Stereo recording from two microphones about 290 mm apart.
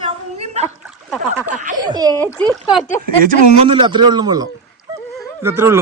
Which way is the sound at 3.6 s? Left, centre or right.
Centre.